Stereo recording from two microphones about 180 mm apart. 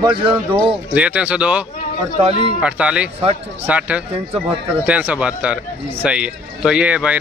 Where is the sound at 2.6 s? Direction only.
5° right (ahead or behind).